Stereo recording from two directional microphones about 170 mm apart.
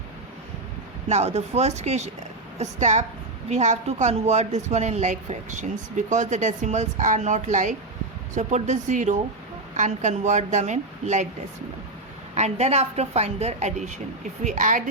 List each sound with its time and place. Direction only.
1.0 s a woman's voice: 40° right (ahead or behind)
12.3 s a woman's voice: 40° right (ahead or behind)